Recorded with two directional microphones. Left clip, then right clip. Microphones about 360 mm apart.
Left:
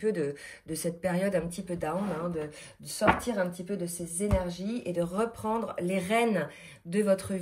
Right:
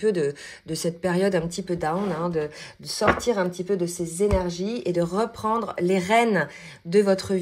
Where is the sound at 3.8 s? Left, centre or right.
Right.